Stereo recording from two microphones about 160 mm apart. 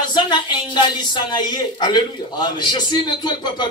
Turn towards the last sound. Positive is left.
turn(degrees=25)  # may be behind; listen again after turning